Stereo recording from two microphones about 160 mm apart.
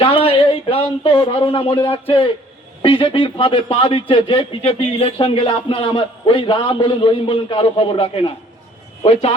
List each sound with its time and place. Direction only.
0.0 s a man's voice: 35° left (ahead or behind)